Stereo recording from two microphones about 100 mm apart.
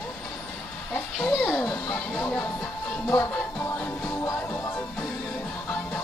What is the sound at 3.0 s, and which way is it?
Music, 35° left (ahead or behind).